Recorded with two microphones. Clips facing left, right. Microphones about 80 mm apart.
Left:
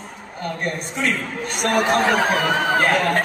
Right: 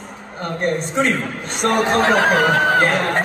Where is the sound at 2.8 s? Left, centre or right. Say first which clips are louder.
Right 1 dB; right.